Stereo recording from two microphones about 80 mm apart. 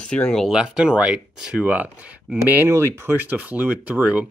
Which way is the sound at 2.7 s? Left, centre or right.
Right.